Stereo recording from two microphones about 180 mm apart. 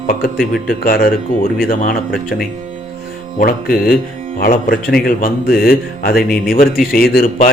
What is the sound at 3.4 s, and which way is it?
A man's voice, 50° left (ahead or behind).